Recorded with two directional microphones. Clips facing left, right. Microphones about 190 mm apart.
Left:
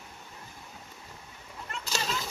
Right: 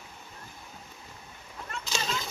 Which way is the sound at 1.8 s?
5° left (ahead or behind).